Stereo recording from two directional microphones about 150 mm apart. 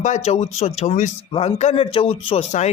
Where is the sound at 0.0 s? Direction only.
50° left (ahead or behind).